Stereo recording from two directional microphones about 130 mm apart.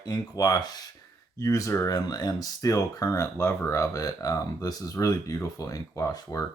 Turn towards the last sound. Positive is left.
turn(degrees=25)  # may be behind; listen again after turning